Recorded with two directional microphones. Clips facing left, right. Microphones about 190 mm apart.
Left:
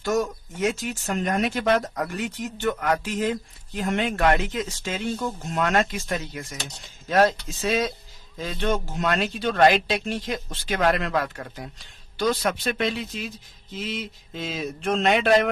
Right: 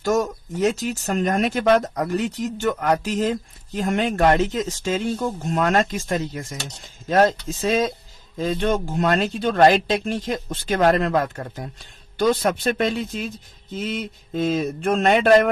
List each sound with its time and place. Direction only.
0.0 s speech: 40° right (ahead or behind)